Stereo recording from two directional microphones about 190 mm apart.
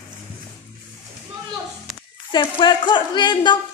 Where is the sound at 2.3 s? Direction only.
25° left (ahead or behind).